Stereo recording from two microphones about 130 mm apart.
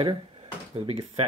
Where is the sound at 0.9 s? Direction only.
50° right (ahead or behind).